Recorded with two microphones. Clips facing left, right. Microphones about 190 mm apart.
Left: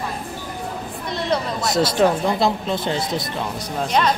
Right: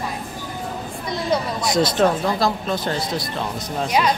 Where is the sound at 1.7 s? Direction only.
10° left (ahead or behind).